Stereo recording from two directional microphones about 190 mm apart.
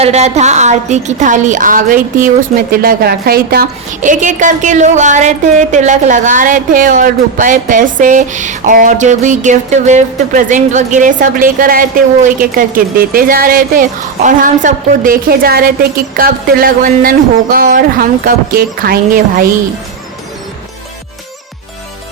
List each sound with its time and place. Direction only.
0.0 s a woman's voice: 35° right (ahead or behind)